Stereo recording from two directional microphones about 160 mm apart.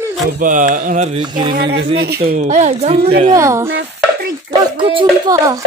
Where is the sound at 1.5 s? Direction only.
90° right.